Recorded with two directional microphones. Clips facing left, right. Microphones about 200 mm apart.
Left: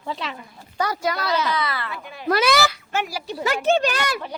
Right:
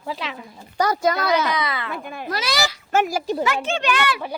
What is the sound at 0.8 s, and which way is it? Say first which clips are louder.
Speech: right 4 dB; 45° right (ahead or behind).